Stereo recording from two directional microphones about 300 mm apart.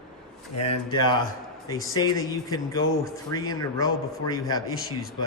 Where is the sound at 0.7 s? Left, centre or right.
Centre.